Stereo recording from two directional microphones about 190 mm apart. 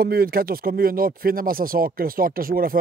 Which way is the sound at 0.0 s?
50° right (ahead or behind).